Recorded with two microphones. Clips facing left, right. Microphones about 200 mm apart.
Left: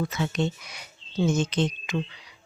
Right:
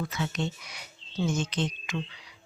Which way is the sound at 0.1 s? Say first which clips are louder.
Left 5 dB; 20° left (ahead or behind).